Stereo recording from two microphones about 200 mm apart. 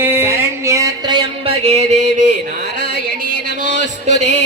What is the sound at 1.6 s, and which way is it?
Music, 35° right (ahead or behind).